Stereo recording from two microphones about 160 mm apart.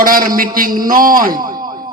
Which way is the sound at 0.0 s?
60° right (ahead or behind).